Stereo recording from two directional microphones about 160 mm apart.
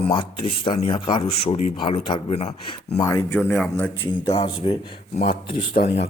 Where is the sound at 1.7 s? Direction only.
35° left (ahead or behind).